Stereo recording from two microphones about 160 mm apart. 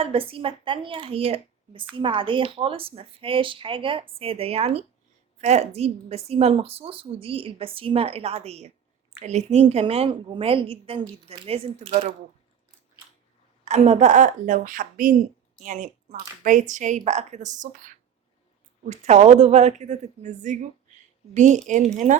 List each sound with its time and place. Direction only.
0.0 s a woman's voice: 35° right (ahead or behind)
13.7 s a woman's voice: 45° right (ahead or behind)